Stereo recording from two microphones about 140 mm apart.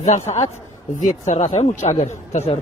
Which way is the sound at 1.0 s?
60° left (ahead or behind).